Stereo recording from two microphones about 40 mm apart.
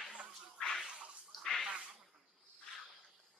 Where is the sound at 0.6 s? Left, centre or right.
Left.